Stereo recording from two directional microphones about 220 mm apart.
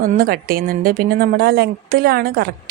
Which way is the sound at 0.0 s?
40° right (ahead or behind).